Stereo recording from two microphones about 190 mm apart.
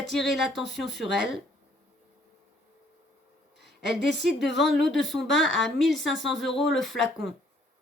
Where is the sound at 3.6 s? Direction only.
60° right (ahead or behind).